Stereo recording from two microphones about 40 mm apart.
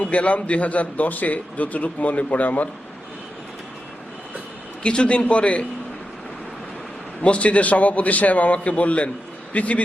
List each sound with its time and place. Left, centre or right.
0.0 s speech: left
4.8 s a man's voice: left
7.2 s speech: left